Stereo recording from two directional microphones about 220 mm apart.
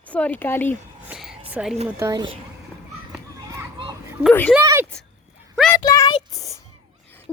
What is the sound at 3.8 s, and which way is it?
Children playing, 15° right (ahead or behind).